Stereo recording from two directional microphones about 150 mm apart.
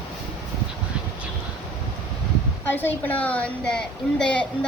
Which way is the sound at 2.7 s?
15° left (ahead or behind).